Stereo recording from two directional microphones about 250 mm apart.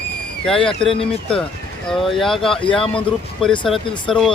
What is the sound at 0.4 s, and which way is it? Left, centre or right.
Speech, centre.